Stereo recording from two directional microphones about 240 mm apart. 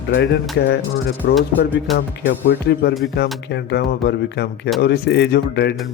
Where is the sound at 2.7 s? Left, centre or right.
Left.